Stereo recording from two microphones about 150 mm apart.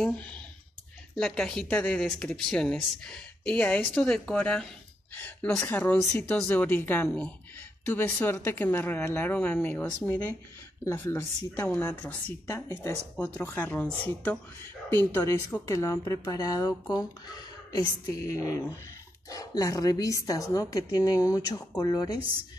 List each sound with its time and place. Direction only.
0.0 s a woman's voice: 10° left (ahead or behind)
10.9 s a woman's voice: 15° left (ahead or behind)